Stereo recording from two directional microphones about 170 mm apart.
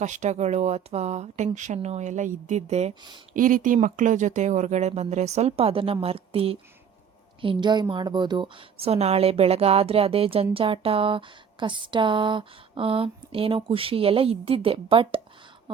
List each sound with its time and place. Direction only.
0.0 s speech: 45° right (ahead or behind)
3.3 s speech: 50° right (ahead or behind); by 15.2 s 30° right (ahead or behind)